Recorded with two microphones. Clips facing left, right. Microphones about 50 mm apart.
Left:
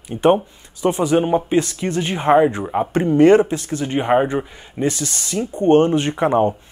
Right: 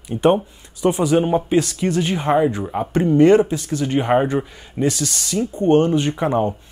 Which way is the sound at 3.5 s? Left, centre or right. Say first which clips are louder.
Even; left.